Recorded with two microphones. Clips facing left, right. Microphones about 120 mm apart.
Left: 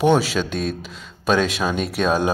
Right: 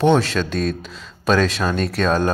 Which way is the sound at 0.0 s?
5° left (ahead or behind).